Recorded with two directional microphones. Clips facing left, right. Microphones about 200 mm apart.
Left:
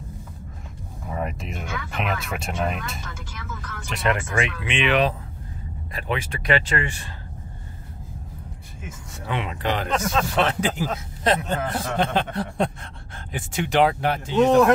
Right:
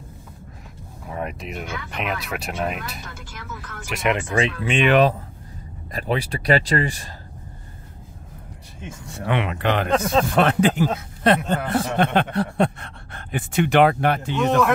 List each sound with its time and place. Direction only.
1.0 s speech: centre (ahead or behind); by 4.4 s 15° right (ahead or behind)
4.4 s speech: 35° right (ahead or behind)
9.2 s a man's voice: 65° right (ahead or behind)